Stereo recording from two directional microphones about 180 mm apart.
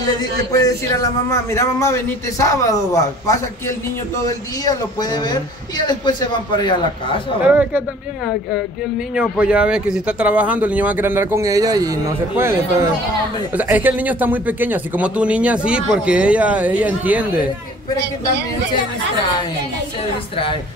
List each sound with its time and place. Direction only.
0.0 s a man's voice: 20° left (ahead or behind)
7.4 s speech: 10° right (ahead or behind)
9.1 s speech: 5° right (ahead or behind)